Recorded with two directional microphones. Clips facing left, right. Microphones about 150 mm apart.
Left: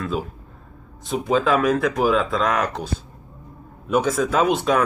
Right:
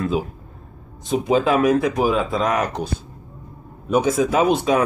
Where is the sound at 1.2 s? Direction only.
10° right (ahead or behind).